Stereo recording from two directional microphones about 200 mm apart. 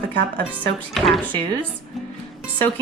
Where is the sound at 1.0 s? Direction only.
Centre (ahead or behind).